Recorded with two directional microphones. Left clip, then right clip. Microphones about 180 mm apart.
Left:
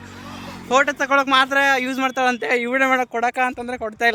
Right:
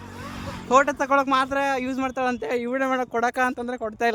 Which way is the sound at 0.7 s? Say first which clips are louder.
Left 2 dB; 15° right (ahead or behind).